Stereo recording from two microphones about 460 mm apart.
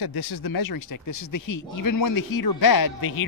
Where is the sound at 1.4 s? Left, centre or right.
Left.